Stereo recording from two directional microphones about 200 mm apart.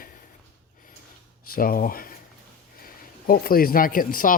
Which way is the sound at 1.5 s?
45° left (ahead or behind).